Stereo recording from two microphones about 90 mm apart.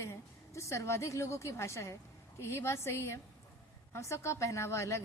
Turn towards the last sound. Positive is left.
turn(degrees=30)  # may be behind; listen again after turning